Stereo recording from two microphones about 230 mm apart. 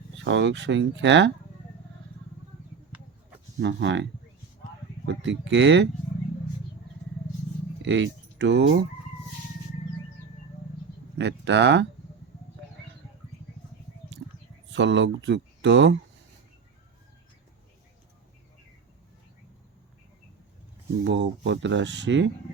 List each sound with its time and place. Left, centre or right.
0.3 s speech: right
3.6 s speech: right
7.8 s speech: right
11.2 s speech: right
14.7 s speech: right
21.0 s speech: right